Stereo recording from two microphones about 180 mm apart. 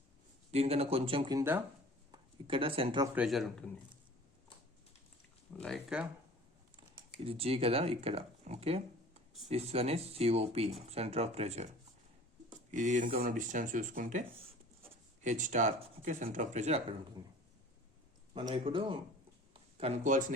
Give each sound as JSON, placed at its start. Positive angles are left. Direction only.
{"t": 0.5, "sound": "speech", "side_deg": -35}
{"t": 1.4, "sound": "speech", "side_deg": -10}
{"t": 2.1, "sound": "speech", "side_deg": -30}
{"t": 3.2, "sound": "speech", "side_deg": 0}
{"t": 5.6, "sound": "speech", "side_deg": 5}
{"t": 6.7, "sound": "speech", "side_deg": -30}
{"t": 12.7, "sound": "speech", "side_deg": -45}
{"t": 18.3, "sound": "speech", "side_deg": -30}